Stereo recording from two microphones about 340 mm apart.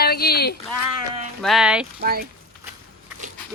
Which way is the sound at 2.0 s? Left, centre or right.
Right.